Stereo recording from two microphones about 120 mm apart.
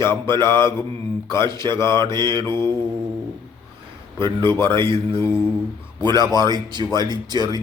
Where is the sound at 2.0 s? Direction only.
40° right (ahead or behind).